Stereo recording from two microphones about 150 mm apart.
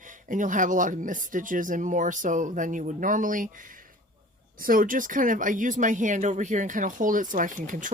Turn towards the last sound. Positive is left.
turn(degrees=-60)  # may be behind; listen again after turning